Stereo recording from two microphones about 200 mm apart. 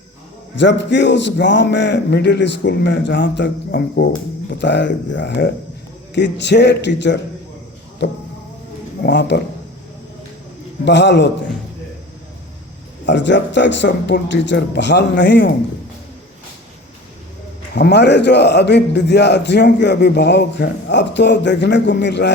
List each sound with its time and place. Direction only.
0.6 s a man's voice: 60° left (ahead or behind)
9.0 s a man's voice: 60° left (ahead or behind)
10.8 s a man's voice: 60° left (ahead or behind)
13.1 s a man's voice: 60° left (ahead or behind)
17.7 s a man's voice: 55° left (ahead or behind)